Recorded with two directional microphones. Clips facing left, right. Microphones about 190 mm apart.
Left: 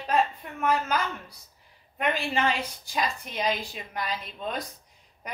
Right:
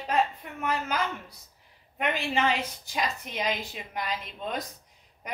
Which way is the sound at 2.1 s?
20° right (ahead or behind).